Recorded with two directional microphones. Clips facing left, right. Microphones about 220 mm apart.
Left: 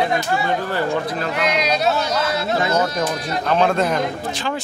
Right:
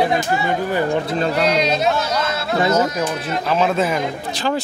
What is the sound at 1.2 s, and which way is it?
Speech, 35° right (ahead or behind).